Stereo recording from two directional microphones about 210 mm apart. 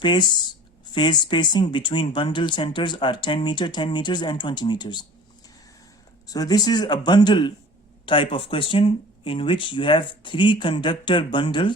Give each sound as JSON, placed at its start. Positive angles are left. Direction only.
{"t": 0.0, "sound": "speech", "side_deg": 20}
{"t": 6.2, "sound": "speech", "side_deg": 15}